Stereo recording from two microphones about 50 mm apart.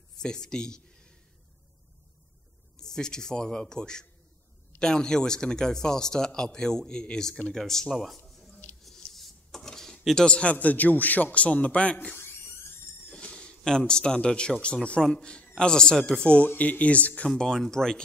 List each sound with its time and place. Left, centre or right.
0.2 s speech: centre
2.8 s speech: centre
8.8 s a sound: centre
10.2 s a man's voice: left
13.1 s a sound: centre
14.6 s a man's voice: left
15.0 s speech: centre
16.4 s a man's voice: left
17.6 s speech: centre